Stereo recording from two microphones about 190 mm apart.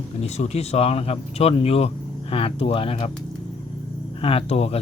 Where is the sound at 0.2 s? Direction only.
35° left (ahead or behind).